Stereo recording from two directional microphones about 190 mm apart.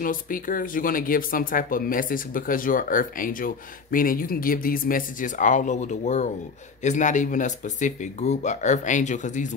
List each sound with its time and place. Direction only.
0.0 s speech: 45° left (ahead or behind)